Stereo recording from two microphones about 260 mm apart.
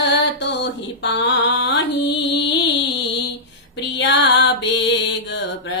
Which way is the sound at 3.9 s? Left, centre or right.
Left.